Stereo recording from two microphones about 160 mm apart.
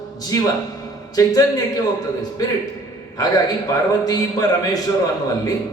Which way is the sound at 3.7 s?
20° left (ahead or behind).